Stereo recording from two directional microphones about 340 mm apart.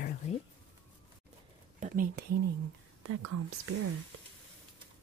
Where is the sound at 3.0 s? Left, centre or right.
Right.